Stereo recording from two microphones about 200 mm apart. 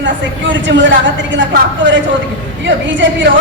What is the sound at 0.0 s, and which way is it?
A man's voice, 65° right (ahead or behind).